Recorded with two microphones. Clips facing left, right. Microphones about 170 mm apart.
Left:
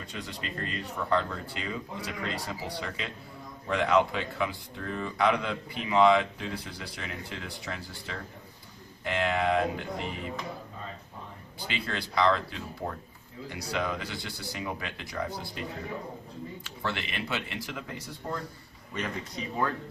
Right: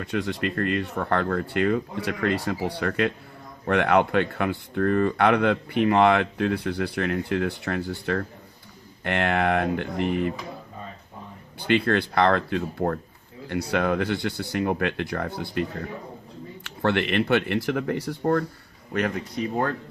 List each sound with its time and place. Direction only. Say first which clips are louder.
0.0 s speech: right 12 dB; 65° right (ahead or behind)
11.6 s speech: right 13 dB; 60° right (ahead or behind)